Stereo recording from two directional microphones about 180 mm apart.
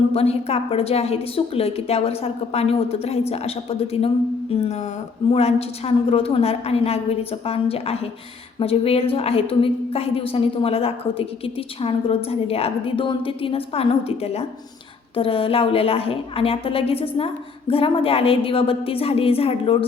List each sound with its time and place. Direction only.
0.1 s a woman's voice: 35° left (ahead or behind)